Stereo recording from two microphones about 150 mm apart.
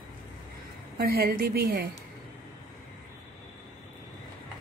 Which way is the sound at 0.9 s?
85° right.